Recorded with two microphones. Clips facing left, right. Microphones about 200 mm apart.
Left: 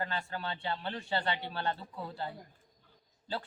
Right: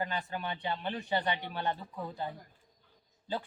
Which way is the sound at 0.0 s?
15° right (ahead or behind).